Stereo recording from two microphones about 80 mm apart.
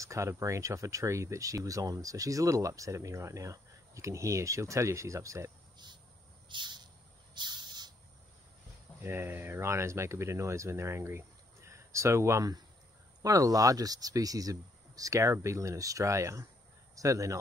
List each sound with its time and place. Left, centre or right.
0.0 s speech: right
6.5 s cricket: right
7.3 s bird: right
9.0 s speech: right